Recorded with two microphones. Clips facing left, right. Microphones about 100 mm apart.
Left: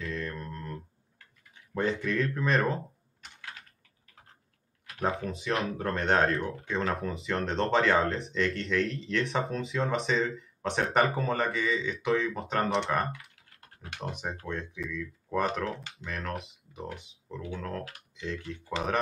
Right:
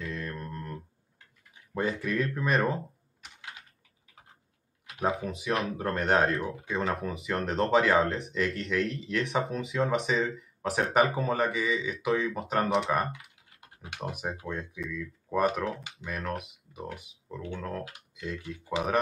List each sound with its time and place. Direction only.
0.0 s mantra: centre (ahead or behind)
1.7 s speech: 5° right (ahead or behind)
3.3 s typing: 15° right (ahead or behind)
4.8 s a sound: 15° right (ahead or behind)
5.1 s speech: 5° right (ahead or behind)